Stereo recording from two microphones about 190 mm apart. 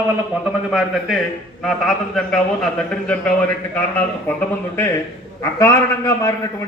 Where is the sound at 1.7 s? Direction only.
5° left (ahead or behind).